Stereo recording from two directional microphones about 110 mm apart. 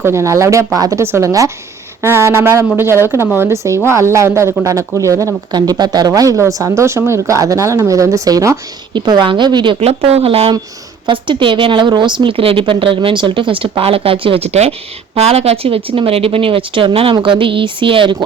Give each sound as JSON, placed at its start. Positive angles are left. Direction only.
{"t": 0.0, "sound": "speech", "side_deg": -25}
{"t": 9.0, "sound": "a woman's voice", "side_deg": -45}
{"t": 9.8, "sound": "speech", "side_deg": -70}
{"t": 11.0, "sound": "a woman's voice", "side_deg": -50}